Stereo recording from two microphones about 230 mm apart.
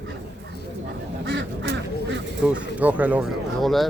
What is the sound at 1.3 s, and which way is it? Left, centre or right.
Duck, right.